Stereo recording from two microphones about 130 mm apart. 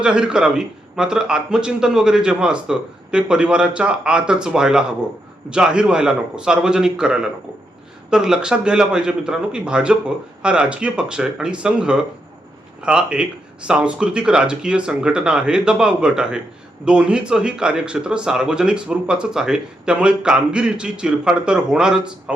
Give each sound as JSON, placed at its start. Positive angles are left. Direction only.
{"t": 0.0, "sound": "speech", "side_deg": -5}